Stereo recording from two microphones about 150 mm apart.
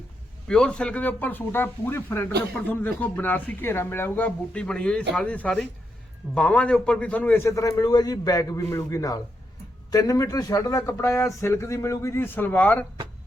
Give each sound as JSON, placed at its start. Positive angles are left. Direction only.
{"t": 0.4, "sound": "a man's voice", "side_deg": 5}